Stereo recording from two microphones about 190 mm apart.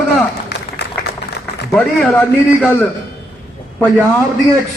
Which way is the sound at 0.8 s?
65° left (ahead or behind).